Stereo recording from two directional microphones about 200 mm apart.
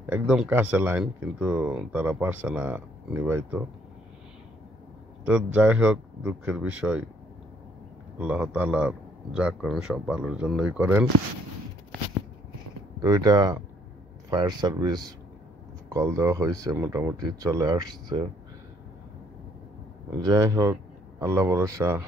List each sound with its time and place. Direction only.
0.0 s speech: 10° right (ahead or behind)
5.2 s a man's voice: 5° right (ahead or behind)
8.2 s a man's voice: 5° right (ahead or behind)
13.0 s speech: 20° right (ahead or behind)
20.1 s speech: 15° right (ahead or behind)